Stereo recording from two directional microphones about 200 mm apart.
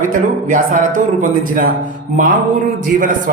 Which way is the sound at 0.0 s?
40° right (ahead or behind).